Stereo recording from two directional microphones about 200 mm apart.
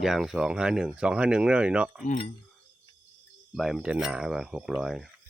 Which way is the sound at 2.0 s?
45° left (ahead or behind).